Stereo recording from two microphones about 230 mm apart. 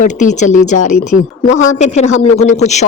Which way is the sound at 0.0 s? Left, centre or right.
Left.